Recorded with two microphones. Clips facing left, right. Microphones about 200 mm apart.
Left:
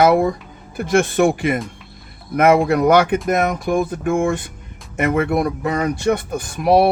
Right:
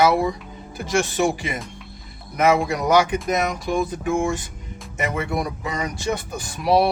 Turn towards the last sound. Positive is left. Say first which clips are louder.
# left 4 dB
turn(degrees=55)  # may be behind; listen again after turning